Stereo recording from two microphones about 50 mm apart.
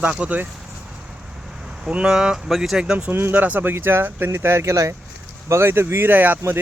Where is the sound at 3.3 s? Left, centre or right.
Right.